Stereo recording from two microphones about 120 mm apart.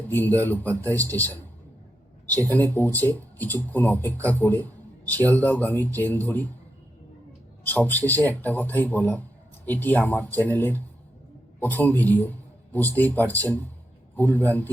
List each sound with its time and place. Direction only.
0.1 s speech: 15° left (ahead or behind)
7.7 s speech: 15° left (ahead or behind)